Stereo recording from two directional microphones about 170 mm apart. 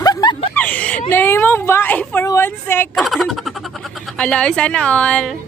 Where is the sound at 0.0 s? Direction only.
25° left (ahead or behind).